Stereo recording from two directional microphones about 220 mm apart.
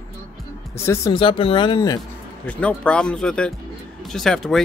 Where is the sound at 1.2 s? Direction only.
25° left (ahead or behind).